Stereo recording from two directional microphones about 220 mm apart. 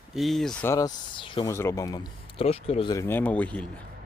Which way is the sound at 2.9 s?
10° left (ahead or behind).